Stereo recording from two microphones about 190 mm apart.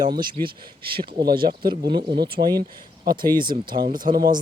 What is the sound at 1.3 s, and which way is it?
Speech, 50° right (ahead or behind).